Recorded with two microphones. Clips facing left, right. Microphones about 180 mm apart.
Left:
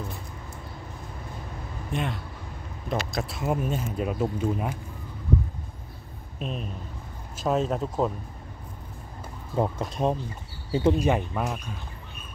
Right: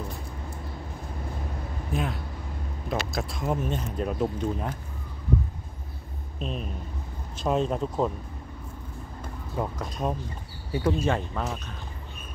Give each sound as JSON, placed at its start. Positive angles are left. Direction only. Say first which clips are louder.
{"t": 1.9, "sound": "speech", "louder": "even", "side_deg": 0}
{"t": 6.4, "sound": "speech", "louder": "even", "side_deg": 0}
{"t": 9.6, "sound": "speech", "louder": "left 5 dB", "side_deg": 25}
{"t": 11.0, "sound": "speech", "louder": "left 2 dB", "side_deg": 15}